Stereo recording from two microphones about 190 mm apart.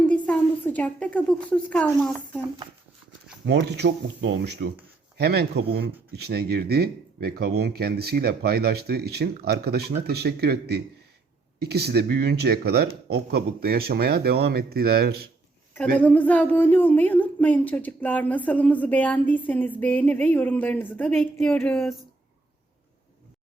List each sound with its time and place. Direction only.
0.0 s a woman's voice: 5° left (ahead or behind)
3.4 s speech: 60° right (ahead or behind)
16.0 s speech: 10° left (ahead or behind)